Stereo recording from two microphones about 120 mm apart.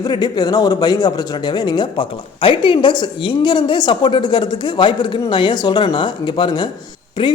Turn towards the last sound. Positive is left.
turn(degrees=40)  # may be behind; listen again after turning